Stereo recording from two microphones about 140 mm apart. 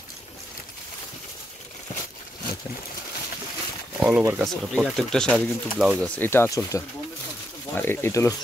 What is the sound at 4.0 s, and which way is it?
Speech, 5° right (ahead or behind).